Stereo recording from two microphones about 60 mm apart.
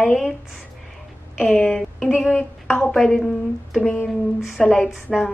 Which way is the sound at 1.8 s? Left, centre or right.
Centre.